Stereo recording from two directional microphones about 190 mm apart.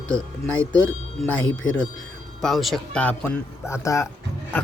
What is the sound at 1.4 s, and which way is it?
Speech, 90° left.